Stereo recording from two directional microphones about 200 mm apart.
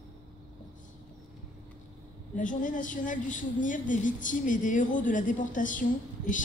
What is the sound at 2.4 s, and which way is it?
A woman's voice, 40° left (ahead or behind).